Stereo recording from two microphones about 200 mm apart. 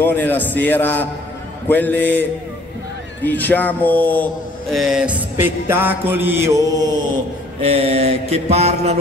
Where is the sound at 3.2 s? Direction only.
10° left (ahead or behind); by 6.6 s 10° right (ahead or behind).